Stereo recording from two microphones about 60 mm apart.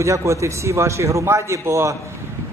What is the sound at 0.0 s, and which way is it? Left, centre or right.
A man's voice, right.